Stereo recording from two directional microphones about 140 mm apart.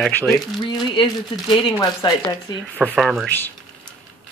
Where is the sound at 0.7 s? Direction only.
35° left (ahead or behind).